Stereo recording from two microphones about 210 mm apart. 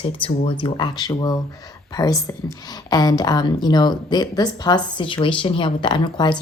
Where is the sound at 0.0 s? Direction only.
25° left (ahead or behind).